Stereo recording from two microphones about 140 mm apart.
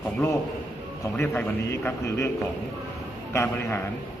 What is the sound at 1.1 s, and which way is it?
A man's voice, 15° left (ahead or behind).